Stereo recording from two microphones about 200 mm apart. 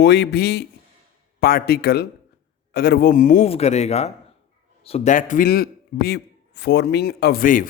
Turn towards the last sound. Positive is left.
turn(degrees=45)  # may be behind; listen again after turning